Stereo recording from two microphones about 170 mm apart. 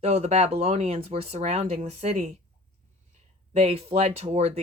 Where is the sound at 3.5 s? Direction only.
35° right (ahead or behind).